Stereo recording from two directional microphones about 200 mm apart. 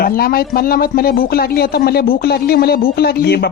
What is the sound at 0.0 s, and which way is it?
Speech, 50° left (ahead or behind).